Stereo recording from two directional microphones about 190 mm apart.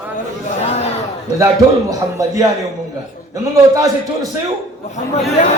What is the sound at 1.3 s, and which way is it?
Speech, 15° right (ahead or behind).